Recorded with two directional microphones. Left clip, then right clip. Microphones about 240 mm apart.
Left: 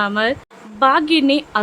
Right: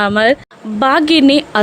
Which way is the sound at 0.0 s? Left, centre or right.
Right.